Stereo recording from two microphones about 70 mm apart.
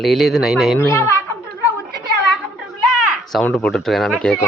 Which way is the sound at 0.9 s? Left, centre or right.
Left.